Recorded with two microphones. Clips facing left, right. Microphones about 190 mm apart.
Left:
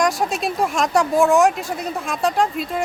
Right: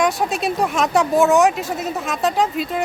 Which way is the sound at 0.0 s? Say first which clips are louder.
Right 1 dB; centre (ahead or behind).